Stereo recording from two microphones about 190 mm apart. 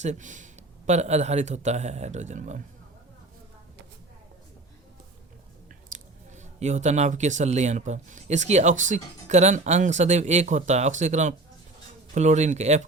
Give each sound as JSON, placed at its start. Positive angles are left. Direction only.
{"t": 0.0, "sound": "speech", "side_deg": -40}
{"t": 5.9, "sound": "speech", "side_deg": -40}